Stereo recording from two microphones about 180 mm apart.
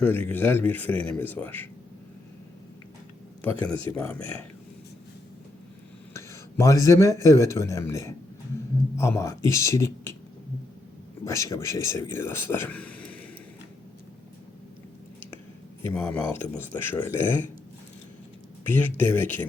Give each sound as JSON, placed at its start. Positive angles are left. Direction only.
{"t": 0.0, "sound": "speech", "side_deg": 10}
{"t": 3.6, "sound": "speech", "side_deg": 10}
{"t": 6.1, "sound": "speech", "side_deg": 15}
{"t": 11.3, "sound": "speech", "side_deg": 15}
{"t": 15.8, "sound": "speech", "side_deg": 15}
{"t": 18.7, "sound": "speech", "side_deg": 10}